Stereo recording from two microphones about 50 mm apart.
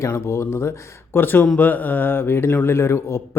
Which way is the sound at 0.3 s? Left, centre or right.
Left.